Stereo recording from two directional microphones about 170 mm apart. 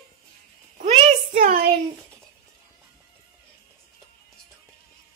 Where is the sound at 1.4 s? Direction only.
55° right (ahead or behind).